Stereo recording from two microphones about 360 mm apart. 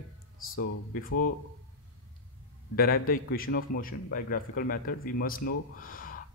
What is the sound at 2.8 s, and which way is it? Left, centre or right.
A man's voice, left.